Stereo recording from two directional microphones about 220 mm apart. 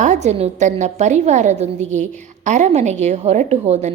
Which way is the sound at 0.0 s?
30° right (ahead or behind).